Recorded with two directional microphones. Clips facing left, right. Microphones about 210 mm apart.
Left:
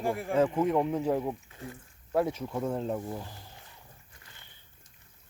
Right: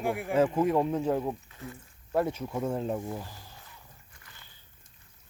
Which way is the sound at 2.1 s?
Centre (ahead or behind).